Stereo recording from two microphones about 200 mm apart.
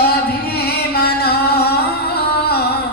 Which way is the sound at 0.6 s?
50° left (ahead or behind).